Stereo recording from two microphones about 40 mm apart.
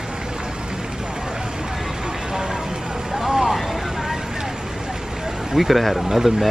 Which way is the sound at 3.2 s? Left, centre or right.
Centre.